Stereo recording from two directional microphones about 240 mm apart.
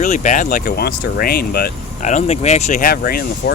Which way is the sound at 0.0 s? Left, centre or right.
Left.